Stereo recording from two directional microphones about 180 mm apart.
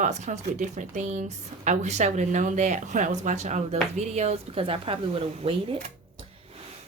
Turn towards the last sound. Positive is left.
turn(degrees=-30)  # may be behind; listen again after turning